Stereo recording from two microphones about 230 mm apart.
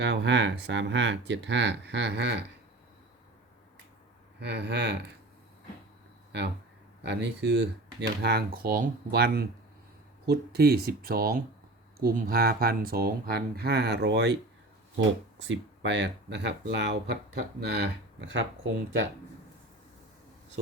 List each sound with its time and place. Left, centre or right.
0.0 s speech: right
4.4 s speech: right
7.0 s speech: right